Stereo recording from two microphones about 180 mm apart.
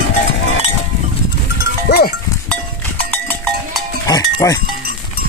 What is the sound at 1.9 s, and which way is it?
Speech, 65° left (ahead or behind).